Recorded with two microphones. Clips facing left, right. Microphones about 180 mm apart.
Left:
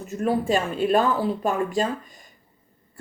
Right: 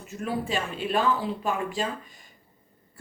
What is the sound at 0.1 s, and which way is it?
Speech, 45° left (ahead or behind).